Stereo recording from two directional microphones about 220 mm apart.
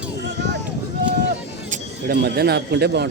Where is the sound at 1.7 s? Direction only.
40° right (ahead or behind).